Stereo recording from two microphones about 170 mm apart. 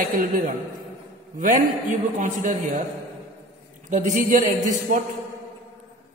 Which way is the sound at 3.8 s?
45° right (ahead or behind).